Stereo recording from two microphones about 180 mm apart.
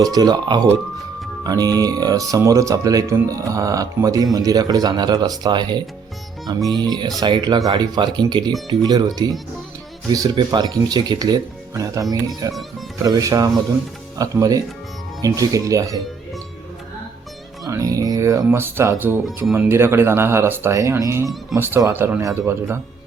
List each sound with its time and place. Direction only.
0.0 s speech: 20° right (ahead or behind)
17.7 s speech: 20° right (ahead or behind)